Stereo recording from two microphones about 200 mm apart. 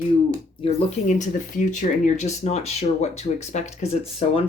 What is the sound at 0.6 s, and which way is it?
Speech, 35° left (ahead or behind).